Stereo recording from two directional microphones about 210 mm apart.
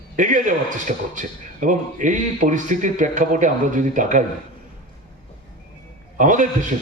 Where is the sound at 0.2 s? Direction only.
40° right (ahead or behind).